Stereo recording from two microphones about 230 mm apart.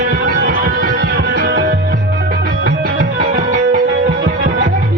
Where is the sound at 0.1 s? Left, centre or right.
Right.